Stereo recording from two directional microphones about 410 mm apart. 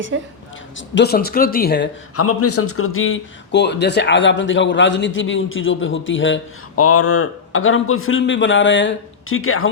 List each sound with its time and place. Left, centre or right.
0.1 s a woman's voice: right
0.8 s a man's voice: left